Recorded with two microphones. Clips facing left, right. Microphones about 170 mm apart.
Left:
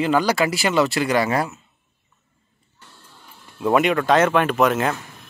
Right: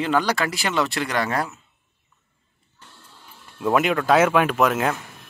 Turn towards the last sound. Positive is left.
turn(degrees=0)  # may be behind; listen again after turning